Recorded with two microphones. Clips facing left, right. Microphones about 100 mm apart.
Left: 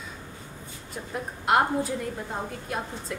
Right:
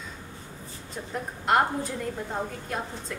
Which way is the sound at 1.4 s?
5° left (ahead or behind).